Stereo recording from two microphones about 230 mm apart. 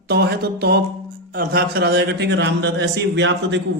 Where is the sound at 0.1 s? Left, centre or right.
Right.